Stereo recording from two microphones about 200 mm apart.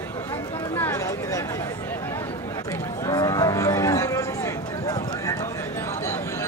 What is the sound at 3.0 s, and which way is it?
Cattle, 20° left (ahead or behind).